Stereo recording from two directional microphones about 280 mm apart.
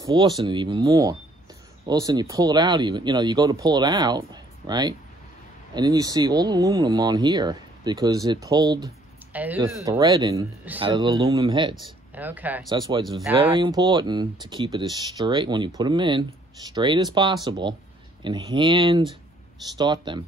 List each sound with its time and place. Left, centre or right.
0.0 s speech: centre
11.7 s speech: centre